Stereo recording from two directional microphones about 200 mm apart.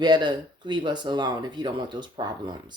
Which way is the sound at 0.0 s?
20° right (ahead or behind).